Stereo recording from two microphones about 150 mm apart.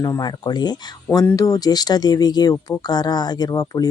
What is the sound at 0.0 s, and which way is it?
Speech, 25° left (ahead or behind).